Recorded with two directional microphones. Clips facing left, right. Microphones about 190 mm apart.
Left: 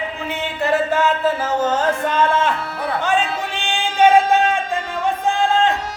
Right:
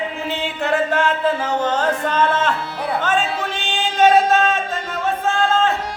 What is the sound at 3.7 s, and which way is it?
Music, 15° left (ahead or behind).